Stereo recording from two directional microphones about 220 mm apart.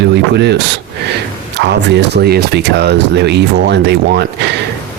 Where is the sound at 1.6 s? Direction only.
50° right (ahead or behind).